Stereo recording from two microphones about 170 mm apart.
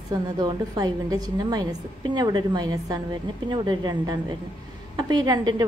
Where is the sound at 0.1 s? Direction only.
25° right (ahead or behind).